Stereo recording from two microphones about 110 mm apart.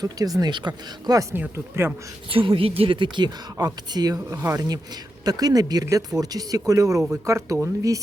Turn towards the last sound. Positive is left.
turn(degrees=-30)  # may be behind; listen again after turning